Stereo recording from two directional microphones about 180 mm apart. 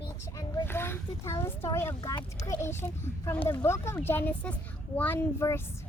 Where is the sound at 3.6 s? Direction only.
15° left (ahead or behind).